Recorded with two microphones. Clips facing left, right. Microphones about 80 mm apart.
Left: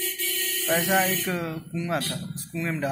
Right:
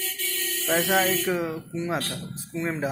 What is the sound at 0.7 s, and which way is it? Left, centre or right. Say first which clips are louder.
Speech: right 1 dB; centre.